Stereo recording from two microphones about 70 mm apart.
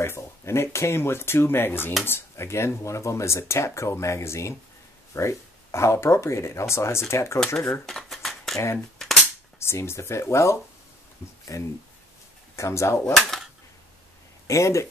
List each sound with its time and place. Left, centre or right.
0.0 s speech: left
7.3 s speech: centre
7.8 s a sound: centre
8.7 s cap gun: centre
9.6 s speech: left
13.0 s speech: centre
14.5 s speech: left